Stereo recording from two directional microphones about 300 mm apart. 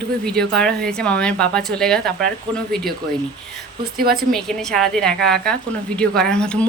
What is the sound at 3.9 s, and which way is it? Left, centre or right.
Speech, right.